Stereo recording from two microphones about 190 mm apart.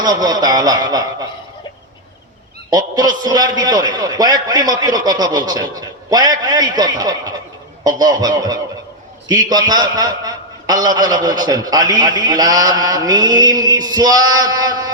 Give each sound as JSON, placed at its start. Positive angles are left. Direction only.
{"t": 0.0, "sound": "a man's voice", "side_deg": -20}
{"t": 2.6, "sound": "a man's voice", "side_deg": -20}